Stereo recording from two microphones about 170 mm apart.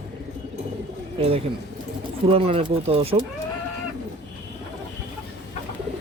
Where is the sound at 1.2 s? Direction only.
35° right (ahead or behind).